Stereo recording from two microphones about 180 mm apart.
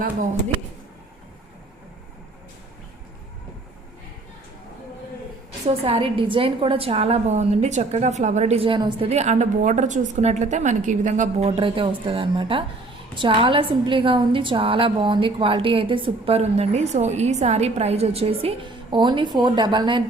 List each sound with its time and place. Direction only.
5.6 s a woman's voice: 35° right (ahead or behind)